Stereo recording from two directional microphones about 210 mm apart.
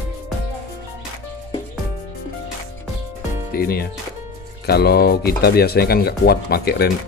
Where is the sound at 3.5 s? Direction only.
45° left (ahead or behind).